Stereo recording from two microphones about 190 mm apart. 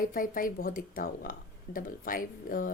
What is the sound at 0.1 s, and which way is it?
Speech, 45° left (ahead or behind).